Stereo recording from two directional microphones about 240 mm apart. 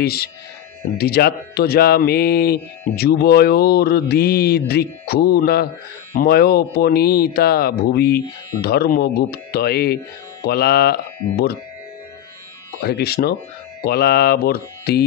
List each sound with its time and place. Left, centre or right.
0.0 s speech: left
12.8 s speech: left